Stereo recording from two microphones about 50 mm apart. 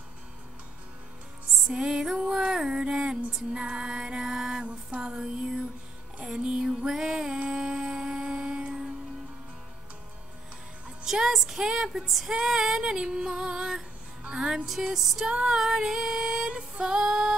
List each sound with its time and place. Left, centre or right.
1.7 s music: centre
11.1 s music: centre
14.7 s music: centre
15.2 s female singing: centre